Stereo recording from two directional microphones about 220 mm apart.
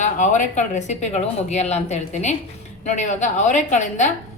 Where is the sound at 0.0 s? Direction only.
35° left (ahead or behind).